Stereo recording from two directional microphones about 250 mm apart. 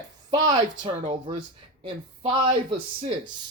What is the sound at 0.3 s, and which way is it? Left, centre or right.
Speech, centre.